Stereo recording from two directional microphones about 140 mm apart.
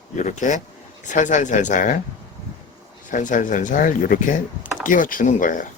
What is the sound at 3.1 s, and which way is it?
Speech, 65° left (ahead or behind).